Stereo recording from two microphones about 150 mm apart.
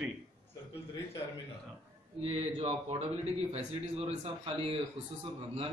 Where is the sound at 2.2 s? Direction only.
40° right (ahead or behind).